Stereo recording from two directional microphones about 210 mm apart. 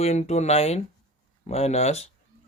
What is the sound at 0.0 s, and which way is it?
Speech, 30° left (ahead or behind).